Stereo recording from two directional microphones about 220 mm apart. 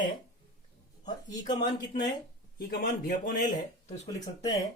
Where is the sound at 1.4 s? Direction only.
20° left (ahead or behind).